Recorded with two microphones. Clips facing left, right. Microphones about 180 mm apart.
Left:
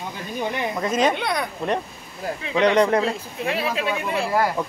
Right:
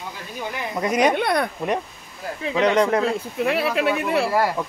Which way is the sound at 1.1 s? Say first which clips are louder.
Right 4 dB; 55° right (ahead or behind).